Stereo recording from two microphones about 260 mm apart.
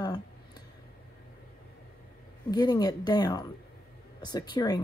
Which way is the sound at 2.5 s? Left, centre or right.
Centre.